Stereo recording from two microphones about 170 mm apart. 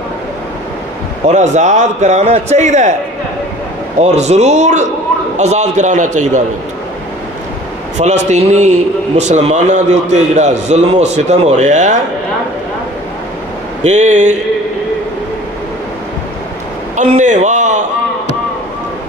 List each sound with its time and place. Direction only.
1.2 s a man's voice: 45° right (ahead or behind)
4.0 s a man's voice: 40° right (ahead or behind)
8.3 s a man's voice: 40° right (ahead or behind)
13.8 s a man's voice: 45° right (ahead or behind)
16.9 s a man's voice: 45° right (ahead or behind)